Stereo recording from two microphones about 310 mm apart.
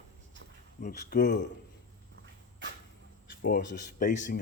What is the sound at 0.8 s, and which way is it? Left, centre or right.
Speech, left.